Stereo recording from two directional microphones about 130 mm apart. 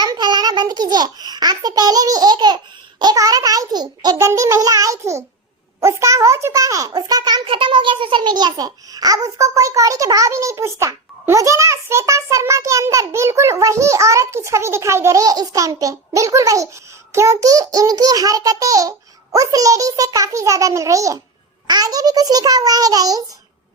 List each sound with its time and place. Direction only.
0.0 s a child's voice: 35° right (ahead or behind)